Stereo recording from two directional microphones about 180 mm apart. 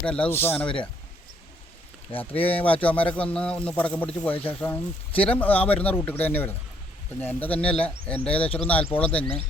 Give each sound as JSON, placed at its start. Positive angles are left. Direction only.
{"t": 0.0, "sound": "speech", "side_deg": 5}
{"t": 2.1, "sound": "speech", "side_deg": 30}
{"t": 2.8, "sound": "speech", "side_deg": 10}